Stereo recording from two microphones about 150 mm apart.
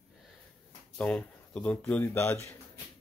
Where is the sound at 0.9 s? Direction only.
5° left (ahead or behind).